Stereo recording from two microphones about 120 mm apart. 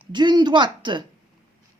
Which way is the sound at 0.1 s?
35° right (ahead or behind).